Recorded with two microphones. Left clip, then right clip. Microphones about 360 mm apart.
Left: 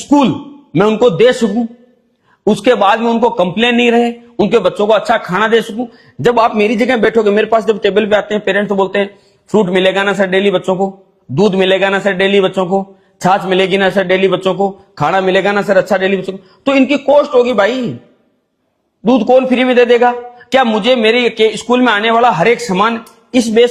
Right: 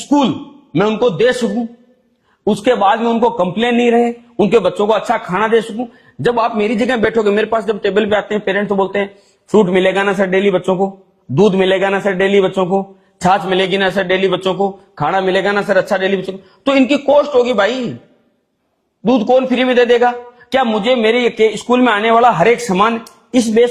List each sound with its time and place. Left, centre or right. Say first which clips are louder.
0.0 s a man's voice: left 3 dB; left
19.0 s a man's voice: left 3 dB; left